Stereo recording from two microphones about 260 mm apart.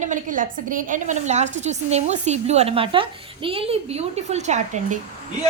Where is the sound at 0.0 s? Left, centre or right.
Right.